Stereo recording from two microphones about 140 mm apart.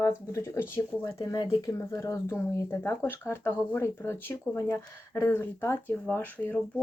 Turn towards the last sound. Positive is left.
turn(degrees=15)  # may be behind; listen again after turning